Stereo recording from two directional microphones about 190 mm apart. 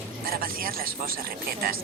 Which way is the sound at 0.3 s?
50° right (ahead or behind).